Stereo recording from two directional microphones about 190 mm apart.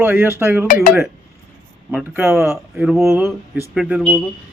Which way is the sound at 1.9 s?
10° right (ahead or behind).